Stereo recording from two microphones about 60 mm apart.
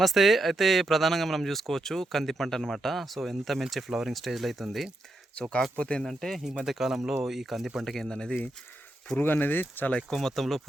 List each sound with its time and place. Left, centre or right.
0.0 s speech: centre
5.4 s speech: centre
6.0 s speech: centre
6.7 s speech: centre
9.1 s speech: left
10.1 s speech: centre